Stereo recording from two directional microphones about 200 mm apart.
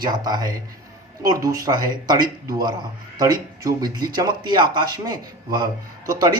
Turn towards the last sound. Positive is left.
turn(degrees=-20)  # may be behind; listen again after turning